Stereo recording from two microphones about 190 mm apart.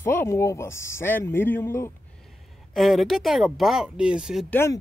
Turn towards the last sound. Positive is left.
turn(degrees=10)  # may be behind; listen again after turning